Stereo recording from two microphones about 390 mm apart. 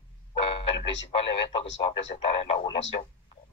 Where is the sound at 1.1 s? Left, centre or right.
Centre.